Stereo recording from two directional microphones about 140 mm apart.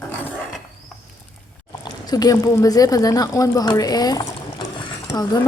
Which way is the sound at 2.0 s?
25° left (ahead or behind).